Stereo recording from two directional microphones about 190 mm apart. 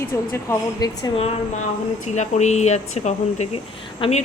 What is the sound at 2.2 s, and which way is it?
Speech, 35° left (ahead or behind).